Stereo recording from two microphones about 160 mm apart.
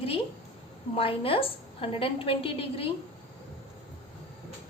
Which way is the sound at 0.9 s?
35° left (ahead or behind).